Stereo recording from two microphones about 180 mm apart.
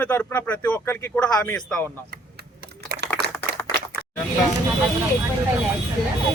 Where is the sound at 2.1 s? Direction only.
65° right (ahead or behind).